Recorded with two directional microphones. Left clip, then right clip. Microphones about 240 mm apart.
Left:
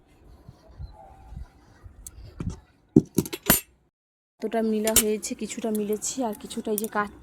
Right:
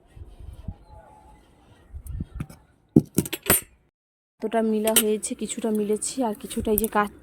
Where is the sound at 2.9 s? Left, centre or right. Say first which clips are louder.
Even; right.